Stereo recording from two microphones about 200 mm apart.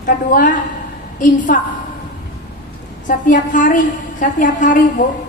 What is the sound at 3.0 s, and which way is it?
A woman's voice, 40° left (ahead or behind).